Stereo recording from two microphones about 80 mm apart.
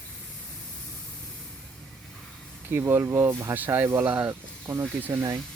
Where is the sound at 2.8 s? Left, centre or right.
Right.